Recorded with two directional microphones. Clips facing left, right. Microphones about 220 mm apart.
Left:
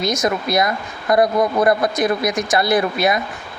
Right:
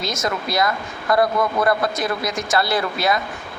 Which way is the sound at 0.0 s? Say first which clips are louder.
Left 5 dB; 15° left (ahead or behind).